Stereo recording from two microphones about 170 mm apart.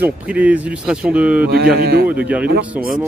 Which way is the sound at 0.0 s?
10° right (ahead or behind).